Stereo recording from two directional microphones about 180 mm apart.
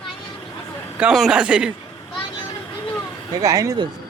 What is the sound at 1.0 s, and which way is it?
Speech, centre (ahead or behind).